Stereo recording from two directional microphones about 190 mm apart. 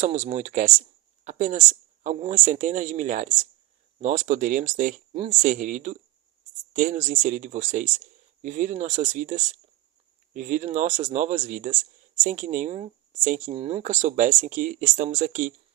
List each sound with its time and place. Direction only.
0.0 s speech: 35° right (ahead or behind)